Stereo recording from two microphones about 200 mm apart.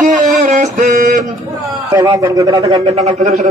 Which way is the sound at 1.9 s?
15° right (ahead or behind).